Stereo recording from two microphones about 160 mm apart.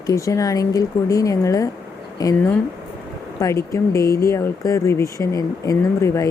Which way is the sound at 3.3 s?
20° left (ahead or behind).